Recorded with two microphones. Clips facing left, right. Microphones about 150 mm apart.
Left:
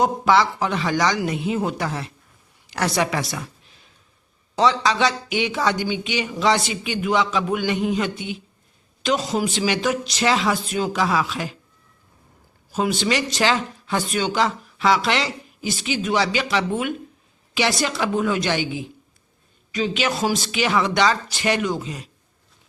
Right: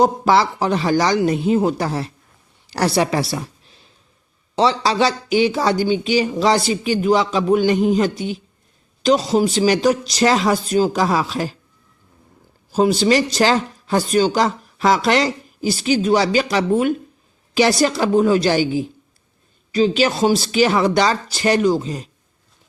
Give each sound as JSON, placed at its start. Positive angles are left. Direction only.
{"t": 0.0, "sound": "speech", "side_deg": -35}
{"t": 4.5, "sound": "speech", "side_deg": -30}
{"t": 12.7, "sound": "speech", "side_deg": -35}